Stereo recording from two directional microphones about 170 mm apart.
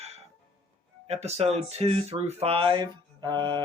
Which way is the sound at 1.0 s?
40° right (ahead or behind).